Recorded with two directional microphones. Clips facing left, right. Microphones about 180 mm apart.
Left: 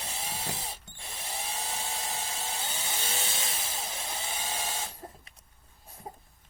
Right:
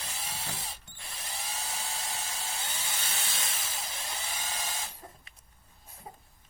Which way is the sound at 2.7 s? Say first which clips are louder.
Left 3 dB; 20° left (ahead or behind).